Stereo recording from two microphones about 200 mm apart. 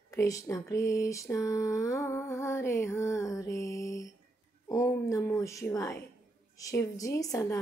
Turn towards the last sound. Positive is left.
turn(degrees=15)  # may be behind; listen again after turning